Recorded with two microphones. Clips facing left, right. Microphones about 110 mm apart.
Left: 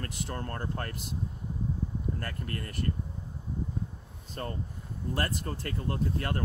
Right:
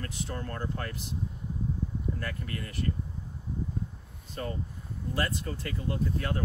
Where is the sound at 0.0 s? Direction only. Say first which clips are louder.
Even; 50° left (ahead or behind).